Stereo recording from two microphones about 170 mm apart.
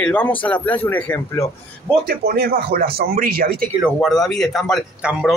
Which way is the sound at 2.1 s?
65° right (ahead or behind).